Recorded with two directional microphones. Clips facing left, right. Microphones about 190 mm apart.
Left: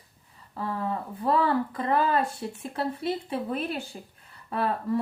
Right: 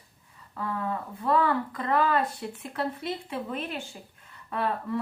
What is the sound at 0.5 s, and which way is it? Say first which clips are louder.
A woman's voice: left 1 dB; 30° left (ahead or behind).